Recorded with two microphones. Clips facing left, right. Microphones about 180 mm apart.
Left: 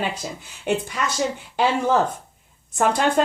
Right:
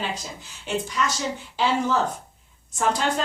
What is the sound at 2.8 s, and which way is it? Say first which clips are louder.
Speech: left 5 dB; 55° left (ahead or behind).